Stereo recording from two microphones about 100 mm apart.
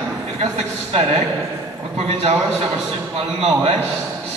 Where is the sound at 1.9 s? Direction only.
90° right.